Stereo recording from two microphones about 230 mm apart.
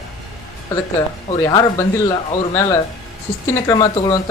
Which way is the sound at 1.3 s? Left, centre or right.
Centre.